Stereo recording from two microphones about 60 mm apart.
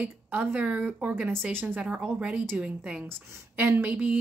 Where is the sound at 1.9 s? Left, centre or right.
Centre.